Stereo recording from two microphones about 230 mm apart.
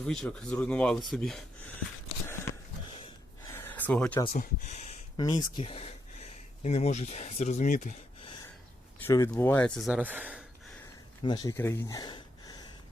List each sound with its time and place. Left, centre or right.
0.0 s speech: centre
3.5 s a sound: centre
4.4 s speech: left
9.0 s speech: centre
11.2 s speech: centre